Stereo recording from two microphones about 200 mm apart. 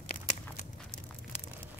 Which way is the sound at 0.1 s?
40° left (ahead or behind).